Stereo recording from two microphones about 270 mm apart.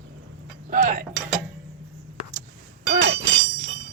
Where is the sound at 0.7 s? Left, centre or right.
Right.